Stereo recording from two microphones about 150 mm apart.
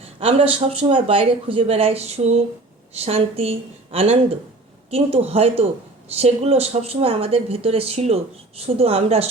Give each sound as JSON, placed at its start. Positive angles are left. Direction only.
{"t": 0.0, "sound": "speech", "side_deg": -40}